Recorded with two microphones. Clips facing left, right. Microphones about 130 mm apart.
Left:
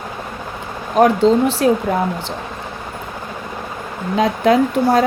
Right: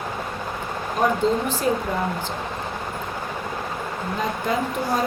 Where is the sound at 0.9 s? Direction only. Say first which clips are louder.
Left 9 dB; 85° left.